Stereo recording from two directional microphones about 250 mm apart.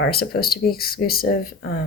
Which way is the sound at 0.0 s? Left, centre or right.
Left.